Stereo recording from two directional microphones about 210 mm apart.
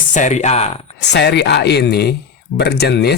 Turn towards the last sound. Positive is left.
turn(degrees=50)  # may be behind; listen again after turning